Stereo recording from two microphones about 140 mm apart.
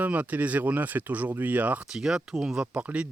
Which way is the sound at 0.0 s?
10° right (ahead or behind).